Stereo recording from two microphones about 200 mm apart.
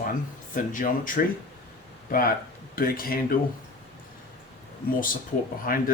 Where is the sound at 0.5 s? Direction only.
40° left (ahead or behind).